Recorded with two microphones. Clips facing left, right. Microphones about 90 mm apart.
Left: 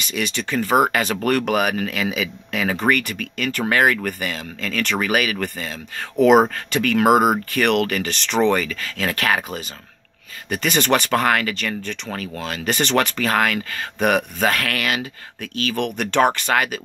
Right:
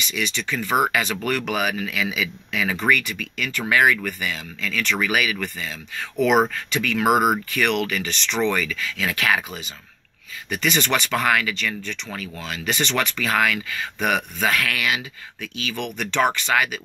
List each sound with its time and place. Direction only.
0.0 s speech: 45° left (ahead or behind)